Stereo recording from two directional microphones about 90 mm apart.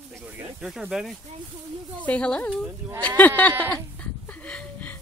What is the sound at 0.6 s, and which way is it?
Speech, 5° right (ahead or behind).